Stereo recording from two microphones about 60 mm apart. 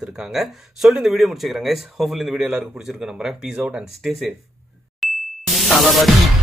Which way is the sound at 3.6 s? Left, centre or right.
Right.